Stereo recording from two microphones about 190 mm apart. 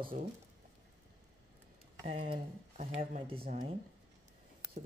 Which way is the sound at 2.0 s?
30° right (ahead or behind).